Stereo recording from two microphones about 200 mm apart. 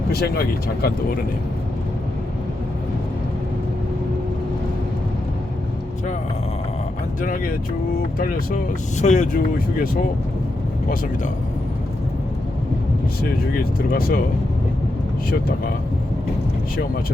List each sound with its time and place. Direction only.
0.1 s speech: 50° left (ahead or behind)
9.0 s speech: 35° left (ahead or behind)
13.7 s speech: 50° left (ahead or behind)